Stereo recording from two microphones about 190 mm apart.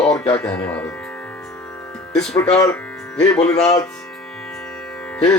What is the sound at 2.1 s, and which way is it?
Speech, 15° left (ahead or behind).